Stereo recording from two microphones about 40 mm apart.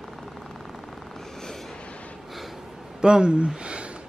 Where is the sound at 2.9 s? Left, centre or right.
Centre.